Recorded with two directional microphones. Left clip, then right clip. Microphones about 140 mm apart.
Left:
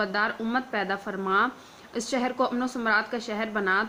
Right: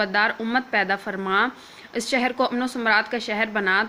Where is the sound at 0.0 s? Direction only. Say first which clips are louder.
Right 5 dB; 20° right (ahead or behind).